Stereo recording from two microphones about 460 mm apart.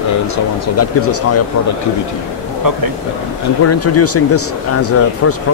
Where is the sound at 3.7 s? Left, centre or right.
Left.